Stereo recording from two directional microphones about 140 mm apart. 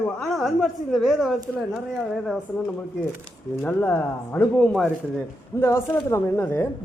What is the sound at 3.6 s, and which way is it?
Speech, 15° left (ahead or behind).